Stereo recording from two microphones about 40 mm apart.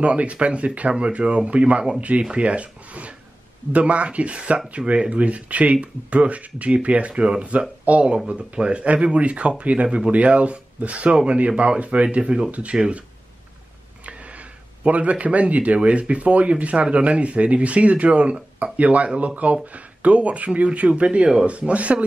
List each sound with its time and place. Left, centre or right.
0.0 s speech: right
9.8 s speech: right
10.1 s speech: right
14.0 s speech: right